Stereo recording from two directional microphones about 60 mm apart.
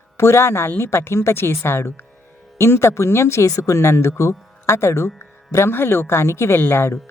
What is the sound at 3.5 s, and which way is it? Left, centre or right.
Speech, left.